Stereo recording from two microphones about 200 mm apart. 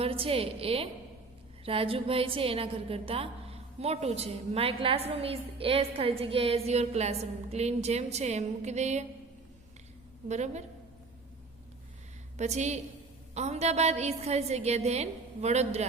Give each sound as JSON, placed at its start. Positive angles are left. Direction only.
{"t": 0.0, "sound": "a woman's voice", "side_deg": -30}
{"t": 10.2, "sound": "a woman's voice", "side_deg": -35}
{"t": 12.4, "sound": "a woman's voice", "side_deg": -35}